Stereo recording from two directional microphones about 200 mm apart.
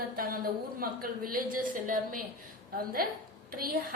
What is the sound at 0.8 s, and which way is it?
A woman's voice, 45° right (ahead or behind).